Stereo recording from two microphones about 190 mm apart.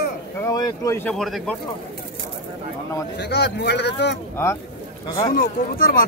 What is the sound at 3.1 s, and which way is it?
Speech, 60° left (ahead or behind).